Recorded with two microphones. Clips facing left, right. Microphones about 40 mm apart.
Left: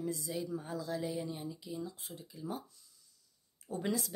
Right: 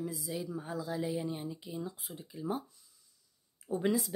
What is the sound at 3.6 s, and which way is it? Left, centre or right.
Speech, centre.